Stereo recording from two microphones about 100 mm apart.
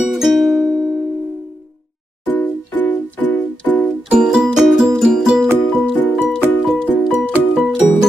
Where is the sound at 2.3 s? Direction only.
15° left (ahead or behind).